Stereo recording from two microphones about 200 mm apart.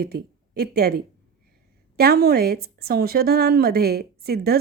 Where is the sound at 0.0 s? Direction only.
55° right (ahead or behind).